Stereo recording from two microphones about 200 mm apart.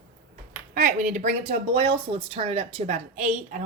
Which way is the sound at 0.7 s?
40° right (ahead or behind).